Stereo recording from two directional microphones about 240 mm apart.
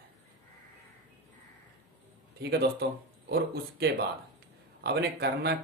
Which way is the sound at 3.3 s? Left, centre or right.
Right.